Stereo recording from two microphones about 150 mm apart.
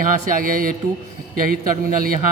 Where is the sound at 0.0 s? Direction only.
65° right (ahead or behind).